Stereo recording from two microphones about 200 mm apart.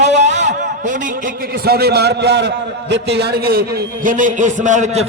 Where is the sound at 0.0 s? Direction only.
35° right (ahead or behind).